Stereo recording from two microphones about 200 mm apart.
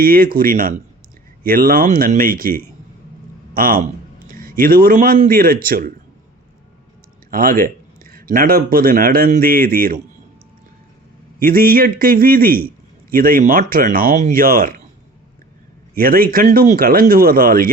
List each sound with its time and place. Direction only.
0.0 s a man's voice: 50° right (ahead or behind)
7.3 s speech: 45° right (ahead or behind)
11.3 s speech: 45° right (ahead or behind)
16.0 s speech: 45° right (ahead or behind)